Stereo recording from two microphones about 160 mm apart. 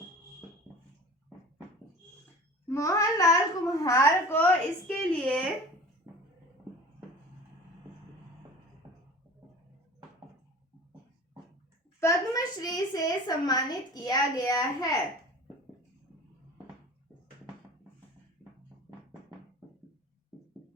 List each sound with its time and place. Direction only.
2.6 s a child's voice: 20° left (ahead or behind)
11.9 s a child's voice: 20° left (ahead or behind)